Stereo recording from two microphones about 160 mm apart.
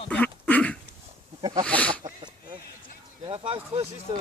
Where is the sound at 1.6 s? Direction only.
10° left (ahead or behind).